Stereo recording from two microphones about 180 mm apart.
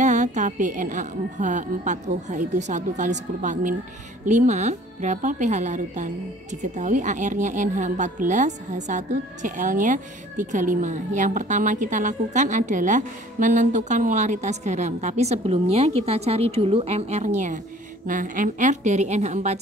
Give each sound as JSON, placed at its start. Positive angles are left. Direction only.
{"t": 0.0, "sound": "a woman's voice", "side_deg": -40}